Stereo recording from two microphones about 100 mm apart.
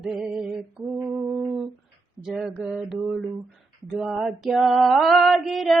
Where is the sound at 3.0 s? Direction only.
5° right (ahead or behind).